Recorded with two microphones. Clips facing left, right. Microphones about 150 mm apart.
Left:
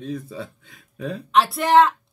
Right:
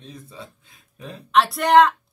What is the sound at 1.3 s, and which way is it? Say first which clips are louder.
Speech: right 1 dB; centre (ahead or behind).